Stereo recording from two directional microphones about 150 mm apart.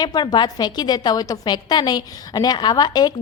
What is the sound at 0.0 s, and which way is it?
A woman's voice, 25° left (ahead or behind).